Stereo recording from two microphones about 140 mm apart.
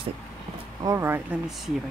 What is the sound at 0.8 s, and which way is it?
Speech, 20° right (ahead or behind).